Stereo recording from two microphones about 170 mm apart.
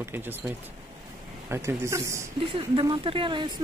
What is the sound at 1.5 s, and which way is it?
Speech, 15° right (ahead or behind).